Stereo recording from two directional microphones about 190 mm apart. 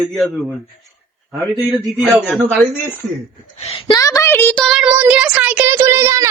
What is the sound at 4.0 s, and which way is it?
Speech, 15° left (ahead or behind).